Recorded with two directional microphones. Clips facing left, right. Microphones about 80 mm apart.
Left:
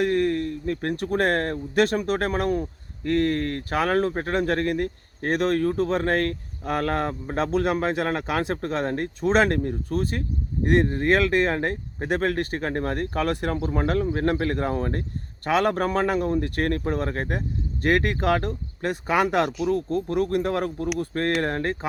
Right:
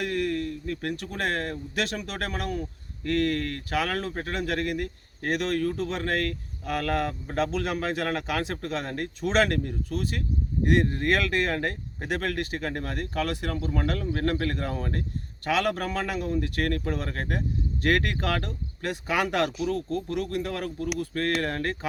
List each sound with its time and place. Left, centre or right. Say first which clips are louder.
0.0 s speech: left 6 dB; left